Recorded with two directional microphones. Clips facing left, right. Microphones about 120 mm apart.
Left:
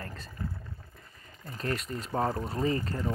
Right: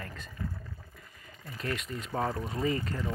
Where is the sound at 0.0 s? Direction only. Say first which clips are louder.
Left 1 dB; 35° left (ahead or behind).